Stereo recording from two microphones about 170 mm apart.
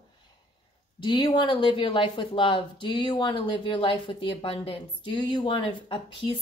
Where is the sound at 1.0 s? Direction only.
25° left (ahead or behind).